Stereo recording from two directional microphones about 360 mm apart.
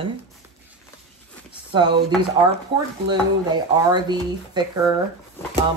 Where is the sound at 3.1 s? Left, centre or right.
Centre.